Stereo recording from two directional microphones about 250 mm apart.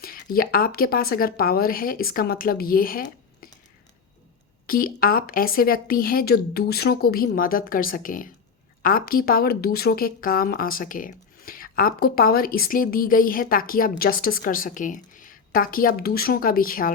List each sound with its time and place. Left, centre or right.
0.0 s a woman's voice: left
4.6 s a woman's voice: left